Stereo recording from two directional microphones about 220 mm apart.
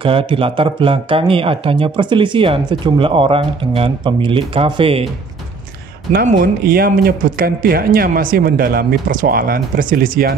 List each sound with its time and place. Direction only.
0.0 s speech: 25° right (ahead or behind)
6.1 s speech: 40° right (ahead or behind)